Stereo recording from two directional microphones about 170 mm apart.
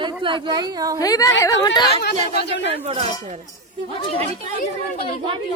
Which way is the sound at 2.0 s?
70° left (ahead or behind).